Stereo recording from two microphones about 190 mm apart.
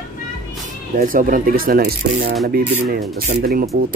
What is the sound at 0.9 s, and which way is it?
Speech, 45° right (ahead or behind).